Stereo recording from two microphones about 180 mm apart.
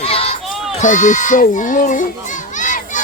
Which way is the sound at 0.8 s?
45° left (ahead or behind).